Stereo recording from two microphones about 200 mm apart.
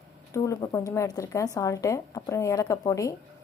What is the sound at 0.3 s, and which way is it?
Speech, 15° left (ahead or behind).